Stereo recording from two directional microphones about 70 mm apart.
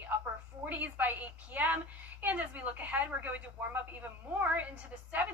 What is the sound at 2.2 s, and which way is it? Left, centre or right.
A woman's voice, right.